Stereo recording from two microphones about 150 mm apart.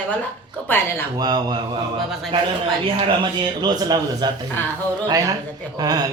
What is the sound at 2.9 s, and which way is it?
A man's voice, 30° right (ahead or behind).